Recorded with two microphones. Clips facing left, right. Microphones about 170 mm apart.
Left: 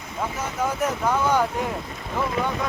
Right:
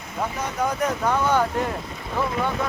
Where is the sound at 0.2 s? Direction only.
10° right (ahead or behind).